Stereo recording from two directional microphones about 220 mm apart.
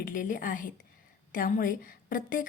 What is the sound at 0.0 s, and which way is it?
A woman's voice, 35° left (ahead or behind).